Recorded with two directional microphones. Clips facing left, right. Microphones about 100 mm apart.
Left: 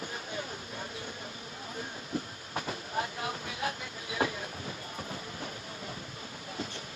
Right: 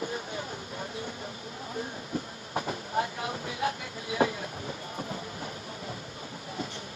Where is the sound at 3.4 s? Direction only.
30° right (ahead or behind).